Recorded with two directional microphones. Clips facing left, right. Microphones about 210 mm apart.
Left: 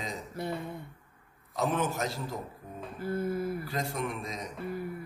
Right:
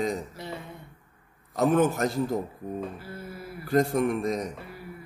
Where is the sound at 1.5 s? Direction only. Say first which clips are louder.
Right 8 dB; 55° right (ahead or behind).